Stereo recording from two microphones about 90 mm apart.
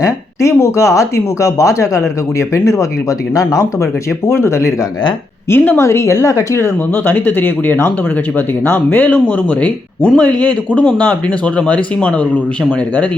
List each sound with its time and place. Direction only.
0.0 s speech: 35° left (ahead or behind)
3.3 s speech: 40° left (ahead or behind); by 12.4 s 15° left (ahead or behind)